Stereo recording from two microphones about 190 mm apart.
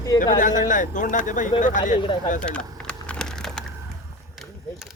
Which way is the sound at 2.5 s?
5° left (ahead or behind).